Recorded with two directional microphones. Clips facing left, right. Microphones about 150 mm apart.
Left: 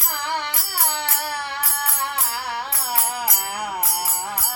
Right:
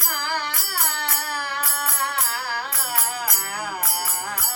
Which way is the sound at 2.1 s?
25° left (ahead or behind).